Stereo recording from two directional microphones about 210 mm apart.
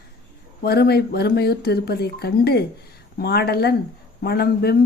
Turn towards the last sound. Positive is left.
turn(degrees=50)  # may be behind; listen again after turning